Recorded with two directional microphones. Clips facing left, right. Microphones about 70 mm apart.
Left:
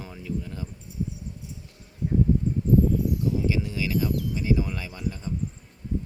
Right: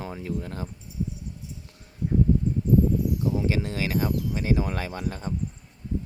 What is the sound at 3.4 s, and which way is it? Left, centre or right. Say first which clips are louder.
Speech: even; right.